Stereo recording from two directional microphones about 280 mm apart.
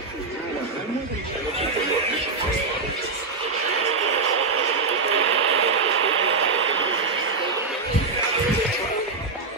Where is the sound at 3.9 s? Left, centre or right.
Right.